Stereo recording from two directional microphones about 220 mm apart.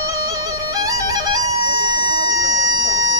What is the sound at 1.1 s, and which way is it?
Bagpipes, 15° right (ahead or behind).